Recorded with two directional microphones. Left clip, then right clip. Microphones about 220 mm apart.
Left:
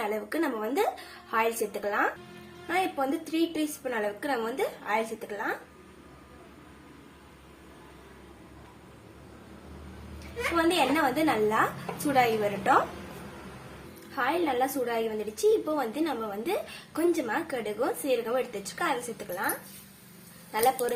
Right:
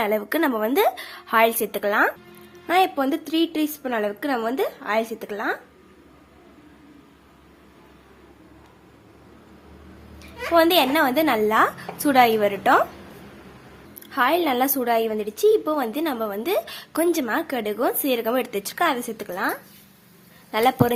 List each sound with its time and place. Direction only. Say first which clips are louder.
0.0 s a woman's voice: right 8 dB; 40° right (ahead or behind)
10.5 s a woman's voice: right 8 dB; 50° right (ahead or behind)
14.2 s a woman's voice: right 7 dB; 45° right (ahead or behind)